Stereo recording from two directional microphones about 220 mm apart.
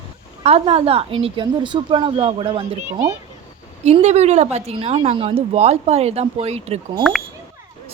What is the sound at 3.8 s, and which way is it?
A woman's voice, 30° right (ahead or behind).